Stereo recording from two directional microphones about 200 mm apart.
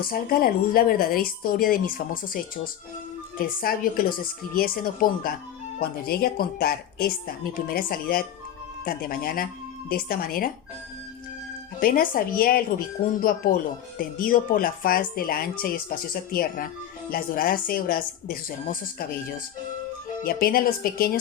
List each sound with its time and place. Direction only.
0.0 s speech: 45° left (ahead or behind)
3.3 s speech: 45° left (ahead or behind)
11.8 s speech: 45° left (ahead or behind)